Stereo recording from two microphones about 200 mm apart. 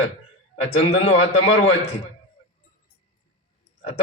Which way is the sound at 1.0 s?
70° left (ahead or behind).